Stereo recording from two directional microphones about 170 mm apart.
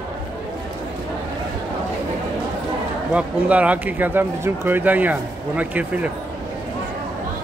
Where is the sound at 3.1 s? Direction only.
10° right (ahead or behind).